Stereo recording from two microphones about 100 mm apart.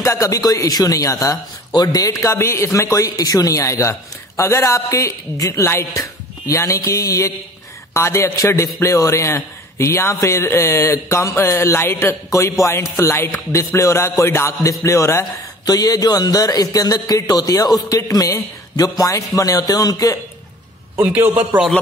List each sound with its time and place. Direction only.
0.0 s a woman's voice: 30° left (ahead or behind)
15.6 s a woman's voice: 40° left (ahead or behind)
20.9 s a man's voice: 25° right (ahead or behind)